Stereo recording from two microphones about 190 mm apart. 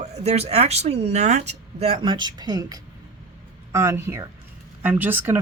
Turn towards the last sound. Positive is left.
turn(degrees=-10)  # may be behind; listen again after turning